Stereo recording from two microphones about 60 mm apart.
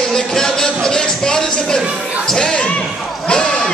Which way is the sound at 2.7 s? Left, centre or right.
Centre.